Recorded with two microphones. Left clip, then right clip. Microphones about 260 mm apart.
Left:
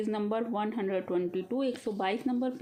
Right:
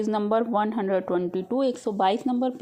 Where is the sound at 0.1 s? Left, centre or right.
Right.